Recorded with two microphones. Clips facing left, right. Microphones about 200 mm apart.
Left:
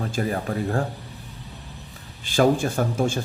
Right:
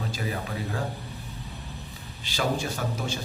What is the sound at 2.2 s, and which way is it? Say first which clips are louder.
Speech: left 9 dB; 50° left (ahead or behind).